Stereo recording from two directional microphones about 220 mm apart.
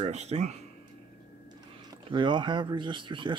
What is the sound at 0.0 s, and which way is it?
Speech, 30° right (ahead or behind).